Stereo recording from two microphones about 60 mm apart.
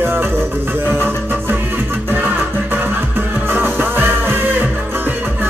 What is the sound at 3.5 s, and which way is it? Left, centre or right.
Music, right.